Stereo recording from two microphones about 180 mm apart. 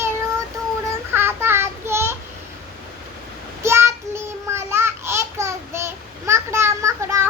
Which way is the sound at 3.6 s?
15° right (ahead or behind).